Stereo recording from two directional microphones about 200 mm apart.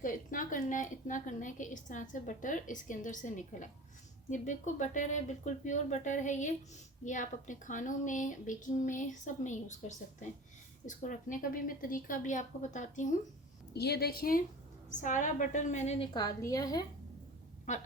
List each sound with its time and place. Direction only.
0.0 s a woman's voice: 40° left (ahead or behind)
13.7 s a woman's voice: 55° left (ahead or behind); by 16.0 s 35° left (ahead or behind)
16.1 s a woman's voice: 15° left (ahead or behind)
17.7 s a woman's voice: 35° left (ahead or behind)